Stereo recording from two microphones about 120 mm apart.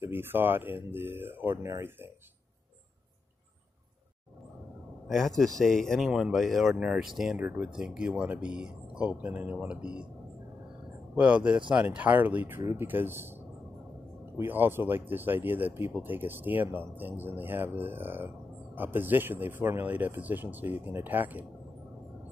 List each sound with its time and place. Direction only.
0.0 s speech: 20° right (ahead or behind)
5.0 s speech: centre (ahead or behind)
11.1 s speech: 10° right (ahead or behind)
14.3 s speech: 15° right (ahead or behind)